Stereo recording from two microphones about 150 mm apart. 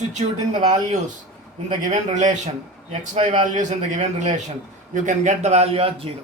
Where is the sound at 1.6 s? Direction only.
55° right (ahead or behind).